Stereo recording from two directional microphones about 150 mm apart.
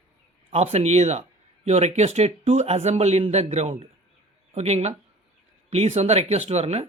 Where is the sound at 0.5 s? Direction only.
45° right (ahead or behind).